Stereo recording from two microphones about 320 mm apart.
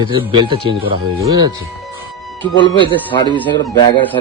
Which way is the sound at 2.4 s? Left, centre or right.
Centre.